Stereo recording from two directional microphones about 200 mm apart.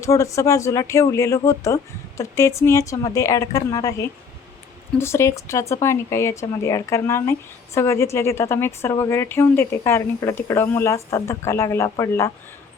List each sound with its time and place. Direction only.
0.0 s speech: 15° left (ahead or behind)